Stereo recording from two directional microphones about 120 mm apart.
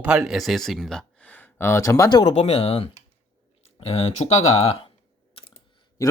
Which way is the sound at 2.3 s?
55° left (ahead or behind).